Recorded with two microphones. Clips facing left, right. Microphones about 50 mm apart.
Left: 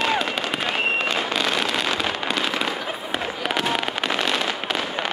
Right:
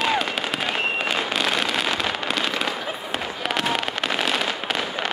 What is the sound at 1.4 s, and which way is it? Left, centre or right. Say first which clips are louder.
Fireworks: even; centre.